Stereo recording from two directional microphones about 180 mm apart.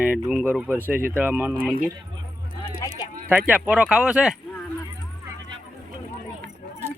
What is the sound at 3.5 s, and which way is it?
Speech, 10° right (ahead or behind).